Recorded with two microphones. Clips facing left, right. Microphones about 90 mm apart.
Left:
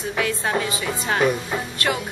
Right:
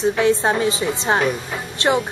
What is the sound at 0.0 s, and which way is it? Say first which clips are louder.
A woman's voice: right 7 dB; 25° right (ahead or behind).